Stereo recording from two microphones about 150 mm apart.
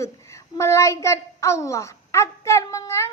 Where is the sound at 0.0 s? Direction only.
20° left (ahead or behind).